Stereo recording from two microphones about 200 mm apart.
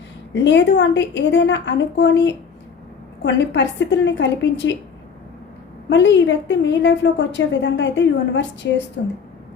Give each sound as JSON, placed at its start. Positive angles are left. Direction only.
{"t": 0.3, "sound": "a woman's voice", "side_deg": 65}
{"t": 5.9, "sound": "a woman's voice", "side_deg": 65}